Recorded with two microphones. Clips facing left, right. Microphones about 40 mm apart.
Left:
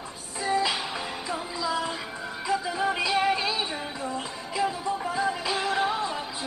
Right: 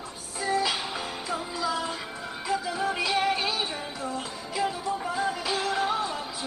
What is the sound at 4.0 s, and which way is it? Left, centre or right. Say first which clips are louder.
Music: left 1 dB; left.